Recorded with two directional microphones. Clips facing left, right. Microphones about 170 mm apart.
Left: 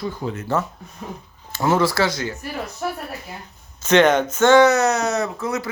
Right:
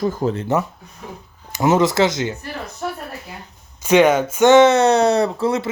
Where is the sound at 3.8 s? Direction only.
10° right (ahead or behind); by 5.7 s 30° right (ahead or behind).